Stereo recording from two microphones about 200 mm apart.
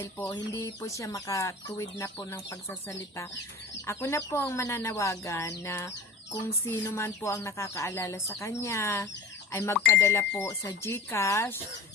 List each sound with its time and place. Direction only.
0.0 s speech: 10° left (ahead or behind)